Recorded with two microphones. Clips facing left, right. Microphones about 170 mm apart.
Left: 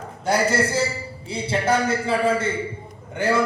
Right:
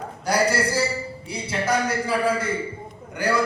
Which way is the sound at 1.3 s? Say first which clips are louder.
Left 3 dB; 25° left (ahead or behind).